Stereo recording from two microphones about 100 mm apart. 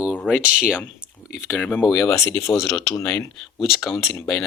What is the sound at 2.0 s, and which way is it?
Speech, 30° left (ahead or behind).